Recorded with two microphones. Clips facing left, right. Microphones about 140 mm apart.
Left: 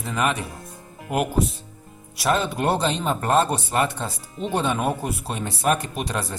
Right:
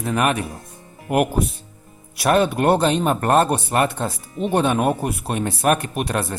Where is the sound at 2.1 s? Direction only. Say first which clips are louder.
Right 5 dB; 60° right (ahead or behind).